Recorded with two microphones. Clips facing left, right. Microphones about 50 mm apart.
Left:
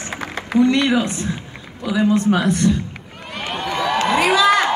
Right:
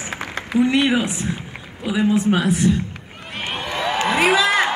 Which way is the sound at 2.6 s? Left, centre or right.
Centre.